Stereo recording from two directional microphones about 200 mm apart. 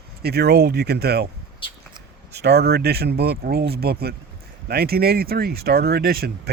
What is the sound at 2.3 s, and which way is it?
Speech, 55° right (ahead or behind).